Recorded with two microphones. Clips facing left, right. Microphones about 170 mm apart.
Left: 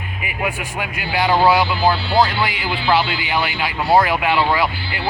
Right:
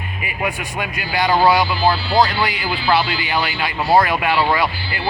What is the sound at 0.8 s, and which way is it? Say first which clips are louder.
Speech: even; 10° left (ahead or behind).